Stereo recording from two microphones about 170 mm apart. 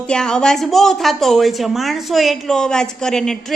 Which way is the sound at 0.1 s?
5° left (ahead or behind).